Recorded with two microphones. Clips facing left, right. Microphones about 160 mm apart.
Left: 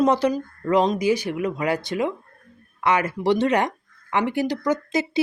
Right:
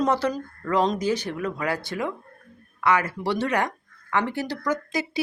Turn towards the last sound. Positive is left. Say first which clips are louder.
# left 4 dB
turn(degrees=20)  # may be behind; listen again after turning